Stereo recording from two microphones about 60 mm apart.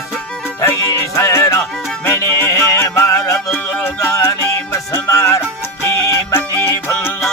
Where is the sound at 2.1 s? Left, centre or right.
Left.